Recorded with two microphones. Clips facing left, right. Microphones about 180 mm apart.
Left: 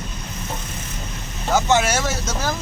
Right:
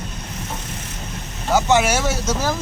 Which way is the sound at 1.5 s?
10° right (ahead or behind).